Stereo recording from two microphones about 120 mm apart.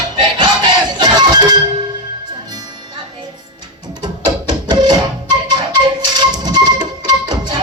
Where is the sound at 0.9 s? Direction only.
35° right (ahead or behind).